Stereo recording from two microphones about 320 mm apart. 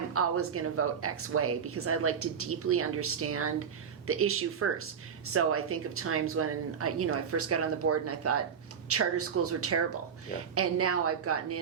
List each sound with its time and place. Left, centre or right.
0.1 s speech: right